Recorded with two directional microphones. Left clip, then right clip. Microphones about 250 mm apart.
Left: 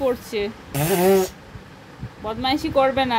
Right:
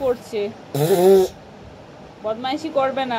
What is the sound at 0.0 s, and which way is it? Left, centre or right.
Speech, left.